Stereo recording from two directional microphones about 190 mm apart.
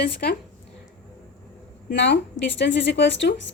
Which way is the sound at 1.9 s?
70° left (ahead or behind).